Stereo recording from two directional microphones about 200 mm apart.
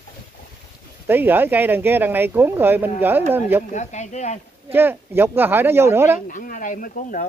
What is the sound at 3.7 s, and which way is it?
Speech, 35° left (ahead or behind).